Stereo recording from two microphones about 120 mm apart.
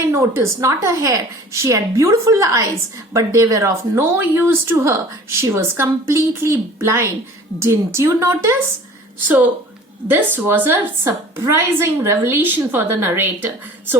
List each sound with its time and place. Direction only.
0.1 s a woman's voice: 20° right (ahead or behind)